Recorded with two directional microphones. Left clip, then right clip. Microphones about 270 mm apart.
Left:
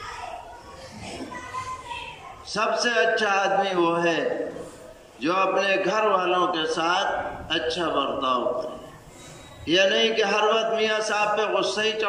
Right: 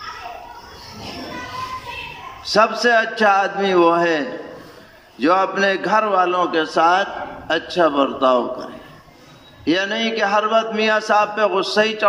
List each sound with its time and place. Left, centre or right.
2.4 s a man's voice: right
5.2 s a man's voice: right
9.7 s a man's voice: right